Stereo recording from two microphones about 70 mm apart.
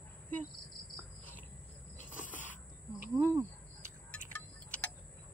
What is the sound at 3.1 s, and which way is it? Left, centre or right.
Speech, right.